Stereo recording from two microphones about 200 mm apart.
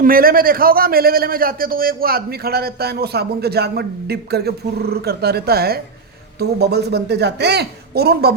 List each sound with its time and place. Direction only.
0.0 s a man's voice: 45° right (ahead or behind)